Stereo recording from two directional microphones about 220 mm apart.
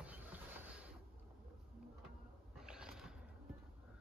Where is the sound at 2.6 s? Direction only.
5° right (ahead or behind).